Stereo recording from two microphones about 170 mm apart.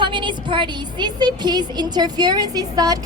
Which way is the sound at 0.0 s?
30° right (ahead or behind).